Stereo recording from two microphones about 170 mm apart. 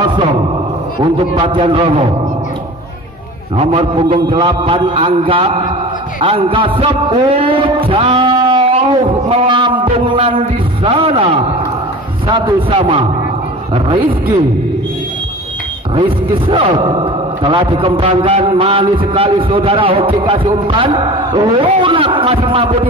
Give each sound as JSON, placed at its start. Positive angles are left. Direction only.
{"t": 0.0, "sound": "a sound", "side_deg": -30}
{"t": 1.1, "sound": "a man's voice", "side_deg": -30}
{"t": 3.5, "sound": "a man's voice", "side_deg": -35}
{"t": 6.2, "sound": "a sound", "side_deg": -30}
{"t": 12.3, "sound": "a man's voice", "side_deg": -30}
{"t": 16.0, "sound": "a man's voice", "side_deg": -30}